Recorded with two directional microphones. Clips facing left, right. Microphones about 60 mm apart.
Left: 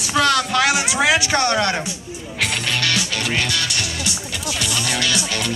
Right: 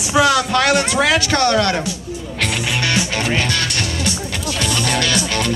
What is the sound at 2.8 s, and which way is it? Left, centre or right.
Music, right.